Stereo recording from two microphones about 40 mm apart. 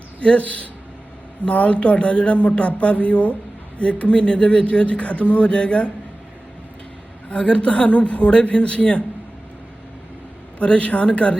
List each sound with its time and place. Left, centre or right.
0.2 s speech: left
7.3 s speech: left
10.6 s speech: left